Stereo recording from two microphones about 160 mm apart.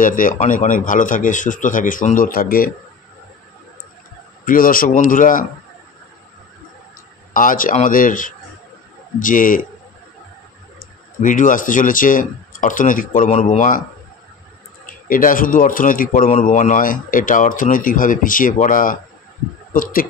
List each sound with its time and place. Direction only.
0.0 s speech: 55° left (ahead or behind)
4.5 s speech: 60° left (ahead or behind)
7.3 s speech: 60° left (ahead or behind)
10.8 s speech: 55° left (ahead or behind)
13.3 s speech: 45° left (ahead or behind)
15.0 s speech: 60° left (ahead or behind)